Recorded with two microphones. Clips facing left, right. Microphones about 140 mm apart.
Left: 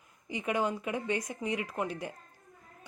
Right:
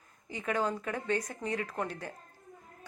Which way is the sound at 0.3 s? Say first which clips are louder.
Left 1 dB; 15° left (ahead or behind).